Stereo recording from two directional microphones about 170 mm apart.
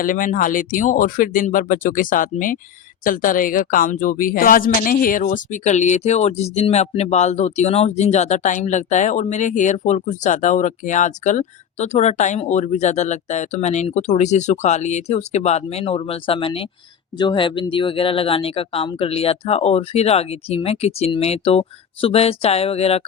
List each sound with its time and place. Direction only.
0.0 s speech: 55° left (ahead or behind); by 23.0 s 35° left (ahead or behind)